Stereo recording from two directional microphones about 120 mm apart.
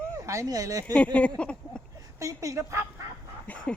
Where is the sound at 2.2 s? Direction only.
25° right (ahead or behind).